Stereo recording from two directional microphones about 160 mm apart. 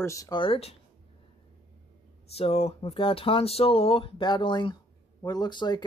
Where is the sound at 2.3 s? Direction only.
40° left (ahead or behind).